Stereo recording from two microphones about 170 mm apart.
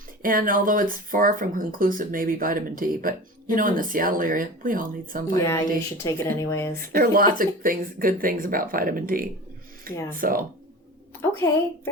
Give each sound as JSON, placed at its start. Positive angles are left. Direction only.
{"t": 0.2, "sound": "speech", "side_deg": -55}
{"t": 5.5, "sound": "speech", "side_deg": 15}
{"t": 6.7, "sound": "speech", "side_deg": -55}